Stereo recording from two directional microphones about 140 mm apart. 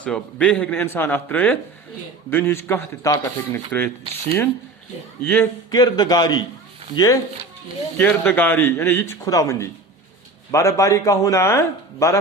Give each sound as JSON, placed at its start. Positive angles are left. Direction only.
{"t": 0.0, "sound": "speech", "side_deg": 10}
{"t": 5.2, "sound": "speech", "side_deg": 15}
{"t": 5.7, "sound": "a man's voice", "side_deg": 30}